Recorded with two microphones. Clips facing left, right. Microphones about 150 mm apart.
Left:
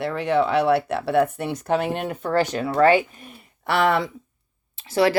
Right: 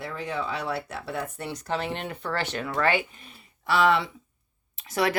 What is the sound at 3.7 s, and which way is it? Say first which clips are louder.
Speech: left 2 dB; 55° left (ahead or behind).